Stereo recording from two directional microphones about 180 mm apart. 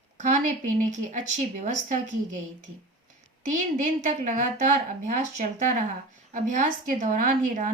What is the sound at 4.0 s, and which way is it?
A woman's voice, 45° right (ahead or behind).